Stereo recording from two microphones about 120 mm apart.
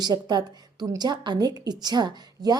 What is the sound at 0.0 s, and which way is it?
A woman's voice, 35° right (ahead or behind).